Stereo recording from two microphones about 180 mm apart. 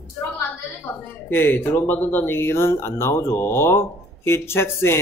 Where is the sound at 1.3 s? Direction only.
10° left (ahead or behind).